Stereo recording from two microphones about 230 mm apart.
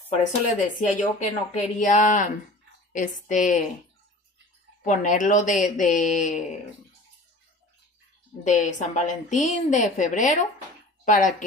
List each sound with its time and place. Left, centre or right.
0.2 s a woman's voice: left
4.8 s a woman's voice: left
8.5 s a woman's voice: left